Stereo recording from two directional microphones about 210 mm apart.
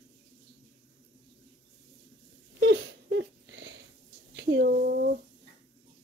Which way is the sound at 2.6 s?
60° right (ahead or behind).